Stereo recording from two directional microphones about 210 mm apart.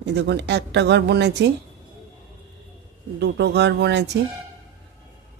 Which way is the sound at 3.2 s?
55° right (ahead or behind).